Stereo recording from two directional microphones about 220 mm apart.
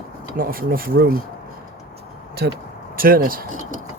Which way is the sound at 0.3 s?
40° right (ahead or behind).